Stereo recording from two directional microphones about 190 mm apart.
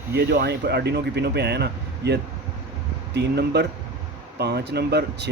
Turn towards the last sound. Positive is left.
turn(degrees=-60)  # may be behind; listen again after turning